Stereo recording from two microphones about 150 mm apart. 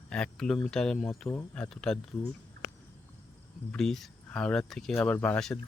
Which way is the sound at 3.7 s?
5° left (ahead or behind).